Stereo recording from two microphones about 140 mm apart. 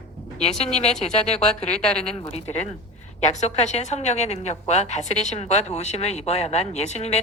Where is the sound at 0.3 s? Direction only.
50° left (ahead or behind).